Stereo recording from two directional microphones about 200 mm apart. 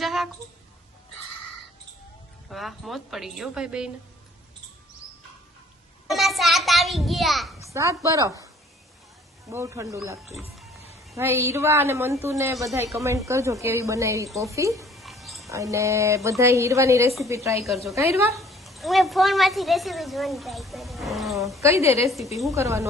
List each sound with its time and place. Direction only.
0.0 s a sound: centre (ahead or behind)
2.5 s a woman's voice: centre (ahead or behind)
6.1 s a sound: centre (ahead or behind)
7.6 s speech: 15° right (ahead or behind)
9.5 s a woman's voice: 15° right (ahead or behind)
14.8 s mouse: centre (ahead or behind)
15.4 s a woman's voice: 15° right (ahead or behind)
18.3 s a woman's voice: centre (ahead or behind)
21.6 s a woman's voice: 15° right (ahead or behind)